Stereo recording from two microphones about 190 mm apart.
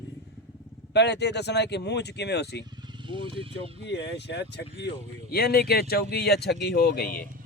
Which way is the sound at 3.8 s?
65° left (ahead or behind).